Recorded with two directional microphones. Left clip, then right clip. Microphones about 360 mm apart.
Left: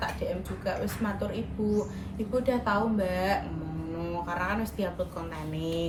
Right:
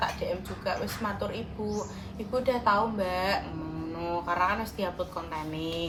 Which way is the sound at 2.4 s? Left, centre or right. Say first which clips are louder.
Right 4 dB; centre.